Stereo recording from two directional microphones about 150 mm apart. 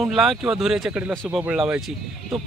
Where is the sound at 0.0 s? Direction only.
Centre (ahead or behind).